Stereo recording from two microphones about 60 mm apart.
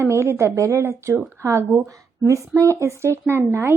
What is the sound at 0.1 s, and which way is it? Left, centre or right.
Speech, right.